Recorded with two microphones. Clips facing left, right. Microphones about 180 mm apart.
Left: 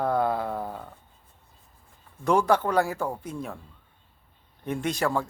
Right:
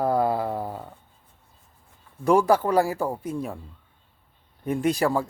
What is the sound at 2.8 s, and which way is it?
Speech, 35° right (ahead or behind).